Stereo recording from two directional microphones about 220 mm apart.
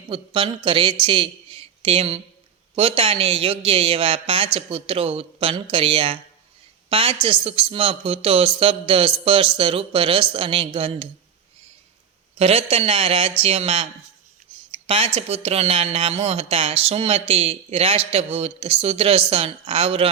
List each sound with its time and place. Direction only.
0.1 s a woman's voice: 25° right (ahead or behind)
12.4 s speech: 25° right (ahead or behind)
14.8 s speech: 25° right (ahead or behind)